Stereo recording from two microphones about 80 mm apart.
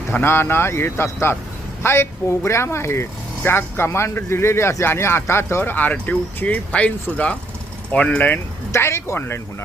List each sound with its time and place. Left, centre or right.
0.1 s speech: left
8.7 s speech: left